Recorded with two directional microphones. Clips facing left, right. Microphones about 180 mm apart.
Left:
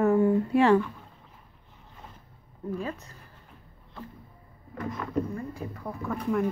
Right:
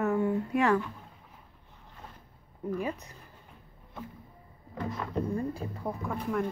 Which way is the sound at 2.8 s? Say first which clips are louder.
Right 1 dB; 15° right (ahead or behind).